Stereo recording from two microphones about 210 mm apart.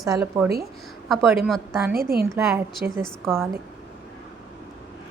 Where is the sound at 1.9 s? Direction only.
45° right (ahead or behind).